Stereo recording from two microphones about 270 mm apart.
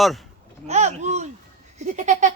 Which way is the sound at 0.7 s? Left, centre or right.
Right.